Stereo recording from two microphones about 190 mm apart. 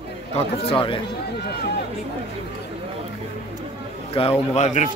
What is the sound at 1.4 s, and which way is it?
Speech, 55° left (ahead or behind).